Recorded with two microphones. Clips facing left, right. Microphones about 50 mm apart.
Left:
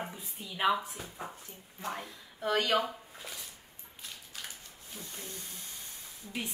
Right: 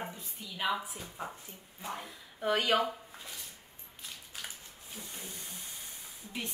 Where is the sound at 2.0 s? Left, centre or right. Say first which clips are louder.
Right 4 dB; centre.